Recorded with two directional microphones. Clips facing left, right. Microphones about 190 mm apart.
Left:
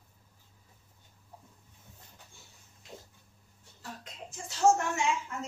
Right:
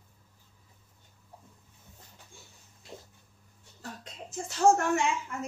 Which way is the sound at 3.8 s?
50° right (ahead or behind).